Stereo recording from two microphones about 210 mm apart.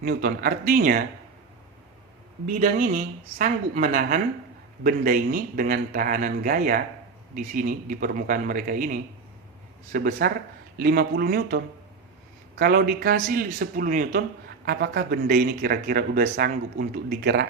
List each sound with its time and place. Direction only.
0.0 s a man's voice: 45° right (ahead or behind)
2.6 s a woman's voice: 40° right (ahead or behind)